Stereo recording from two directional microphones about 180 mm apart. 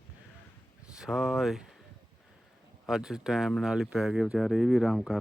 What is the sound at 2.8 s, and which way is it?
Speech, centre (ahead or behind).